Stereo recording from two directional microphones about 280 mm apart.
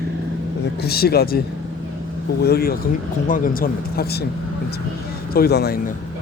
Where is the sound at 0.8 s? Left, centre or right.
Left.